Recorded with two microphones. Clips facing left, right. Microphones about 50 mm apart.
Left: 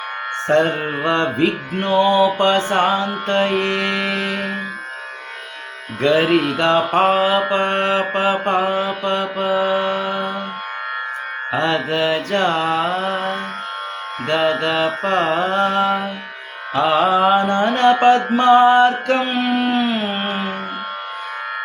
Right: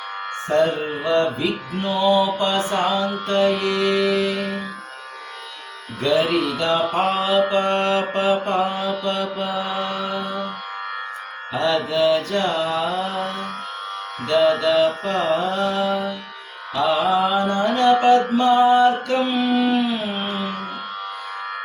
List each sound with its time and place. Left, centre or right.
0.4 s music: left
0.7 s music: left
6.0 s carnatic music: left
7.0 s music: left
11.5 s music: left
15.0 s carnatic music: left
20.2 s music: left